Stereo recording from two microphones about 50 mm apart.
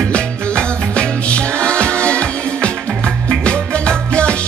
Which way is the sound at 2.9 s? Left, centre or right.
Right.